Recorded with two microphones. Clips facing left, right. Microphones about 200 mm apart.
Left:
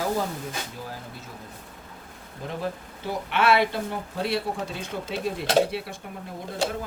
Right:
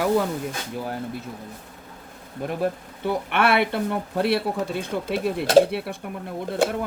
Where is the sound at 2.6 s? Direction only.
60° right (ahead or behind).